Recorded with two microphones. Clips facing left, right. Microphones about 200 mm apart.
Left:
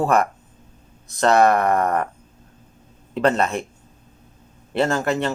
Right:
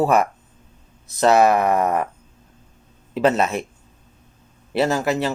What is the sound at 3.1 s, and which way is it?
Speech, 5° right (ahead or behind).